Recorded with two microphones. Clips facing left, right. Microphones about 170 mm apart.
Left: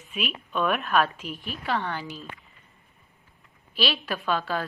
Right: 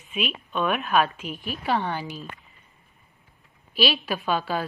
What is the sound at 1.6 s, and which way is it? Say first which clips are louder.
Speech: right 3 dB; 15° right (ahead or behind).